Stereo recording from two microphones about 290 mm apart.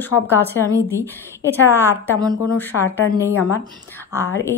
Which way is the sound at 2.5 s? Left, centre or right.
Centre.